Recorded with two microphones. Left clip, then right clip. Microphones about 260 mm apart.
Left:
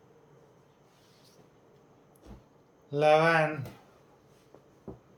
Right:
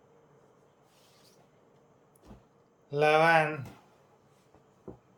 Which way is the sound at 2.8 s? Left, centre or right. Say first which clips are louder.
Even; centre.